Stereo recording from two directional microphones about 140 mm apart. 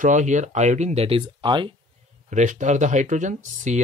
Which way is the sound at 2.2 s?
60° right (ahead or behind).